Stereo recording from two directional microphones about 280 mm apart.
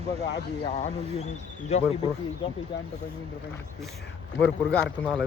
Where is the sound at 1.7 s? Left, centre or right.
Left.